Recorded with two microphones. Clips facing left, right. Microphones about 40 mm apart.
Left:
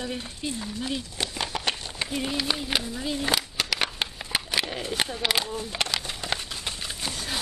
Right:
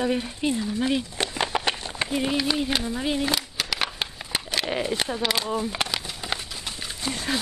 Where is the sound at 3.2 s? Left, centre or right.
Centre.